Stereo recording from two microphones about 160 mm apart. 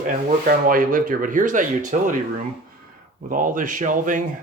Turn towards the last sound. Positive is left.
turn(degrees=-55)  # may be behind; listen again after turning